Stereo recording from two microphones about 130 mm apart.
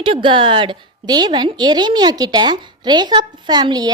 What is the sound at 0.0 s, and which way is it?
A woman's voice, 40° right (ahead or behind).